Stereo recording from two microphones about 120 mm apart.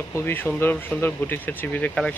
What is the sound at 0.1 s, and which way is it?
Speech, 20° left (ahead or behind).